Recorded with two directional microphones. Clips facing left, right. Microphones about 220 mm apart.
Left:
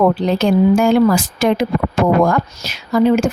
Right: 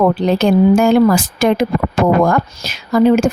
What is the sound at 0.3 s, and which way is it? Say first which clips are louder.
A woman's voice: right 3 dB; 50° right (ahead or behind).